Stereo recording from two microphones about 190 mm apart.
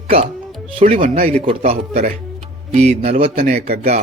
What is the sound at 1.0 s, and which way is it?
Speech, 50° right (ahead or behind).